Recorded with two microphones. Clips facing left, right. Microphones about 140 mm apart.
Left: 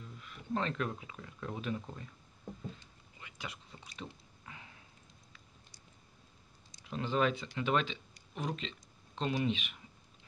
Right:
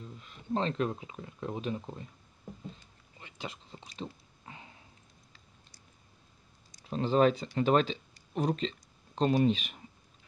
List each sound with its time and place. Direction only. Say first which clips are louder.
0.0 s speech: right 3 dB; 25° right (ahead or behind)
3.2 s biting: right 4 dB; 30° right (ahead or behind)
6.8 s speech: right 7 dB; 35° right (ahead or behind)